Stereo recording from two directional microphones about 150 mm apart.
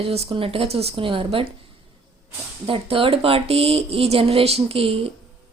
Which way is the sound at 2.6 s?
35° right (ahead or behind).